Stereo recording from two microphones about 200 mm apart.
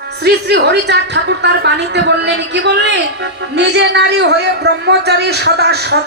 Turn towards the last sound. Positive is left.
turn(degrees=-55)  # may be behind; listen again after turning